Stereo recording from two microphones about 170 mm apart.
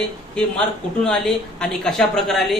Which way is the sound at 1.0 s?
5° left (ahead or behind).